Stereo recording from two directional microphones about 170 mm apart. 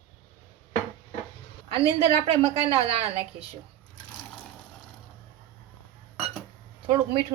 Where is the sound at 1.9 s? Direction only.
30° right (ahead or behind).